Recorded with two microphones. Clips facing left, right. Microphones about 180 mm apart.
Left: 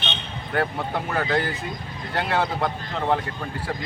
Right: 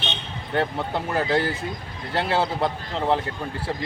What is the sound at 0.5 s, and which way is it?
Speech, 25° right (ahead or behind).